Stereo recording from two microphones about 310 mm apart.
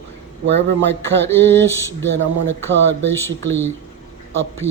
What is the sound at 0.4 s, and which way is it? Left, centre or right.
Speech, right.